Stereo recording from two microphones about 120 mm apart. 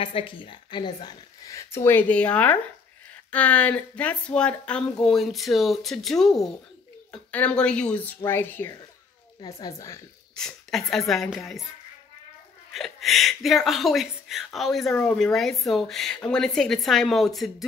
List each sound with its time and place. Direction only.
0.0 s a woman's voice: 50° left (ahead or behind)
1.4 s speech: 25° left (ahead or behind)
9.4 s speech: 30° left (ahead or behind)
10.3 s speech: 5° left (ahead or behind)
12.7 s speech: centre (ahead or behind)